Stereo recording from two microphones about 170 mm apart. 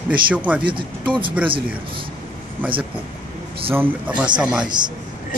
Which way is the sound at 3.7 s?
10° right (ahead or behind).